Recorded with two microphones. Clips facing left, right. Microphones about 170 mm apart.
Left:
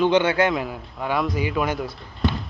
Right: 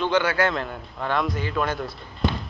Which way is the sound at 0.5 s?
5° left (ahead or behind).